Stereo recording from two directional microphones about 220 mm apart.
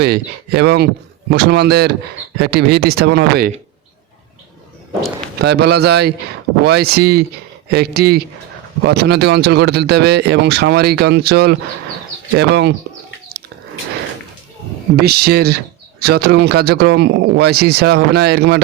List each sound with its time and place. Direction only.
0.0 s speech: 50° right (ahead or behind)
5.4 s speech: 45° right (ahead or behind)
14.9 s speech: 45° right (ahead or behind)